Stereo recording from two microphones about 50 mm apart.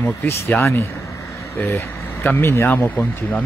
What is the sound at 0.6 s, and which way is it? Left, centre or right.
Speech, left.